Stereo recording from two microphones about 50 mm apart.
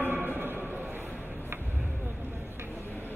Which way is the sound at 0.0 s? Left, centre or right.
Right.